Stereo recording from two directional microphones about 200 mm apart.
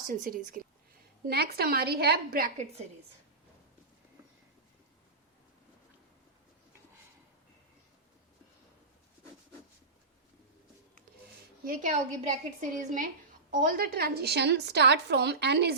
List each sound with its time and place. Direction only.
0.1 s a woman's voice: 45° right (ahead or behind)
11.6 s a woman's voice: 40° right (ahead or behind)